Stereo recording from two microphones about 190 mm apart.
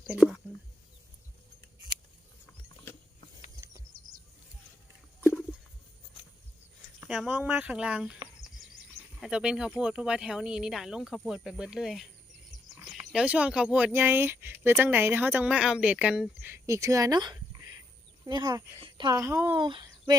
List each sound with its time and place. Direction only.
0.1 s speech: centre (ahead or behind)
7.1 s speech: centre (ahead or behind)
9.2 s speech: 5° right (ahead or behind)
19.5 s speech: 25° right (ahead or behind)